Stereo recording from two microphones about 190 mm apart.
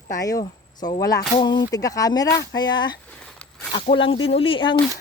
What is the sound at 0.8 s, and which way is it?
Speech, 20° left (ahead or behind).